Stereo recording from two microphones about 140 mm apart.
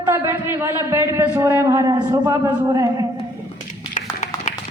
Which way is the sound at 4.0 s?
60° left (ahead or behind).